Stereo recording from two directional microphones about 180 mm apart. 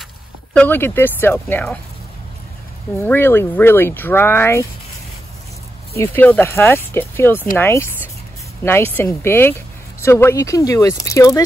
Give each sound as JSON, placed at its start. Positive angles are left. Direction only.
{"t": 0.6, "sound": "speech", "side_deg": 10}
{"t": 3.0, "sound": "speech", "side_deg": 10}
{"t": 5.9, "sound": "speech", "side_deg": 10}